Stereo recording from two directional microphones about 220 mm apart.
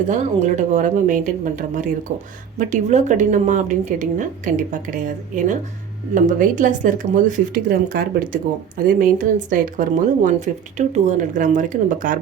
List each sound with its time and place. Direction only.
0.1 s speech: 35° right (ahead or behind)